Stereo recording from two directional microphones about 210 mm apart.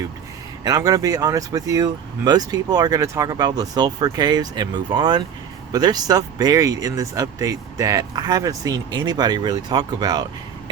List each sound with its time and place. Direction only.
0.6 s speech: 15° right (ahead or behind)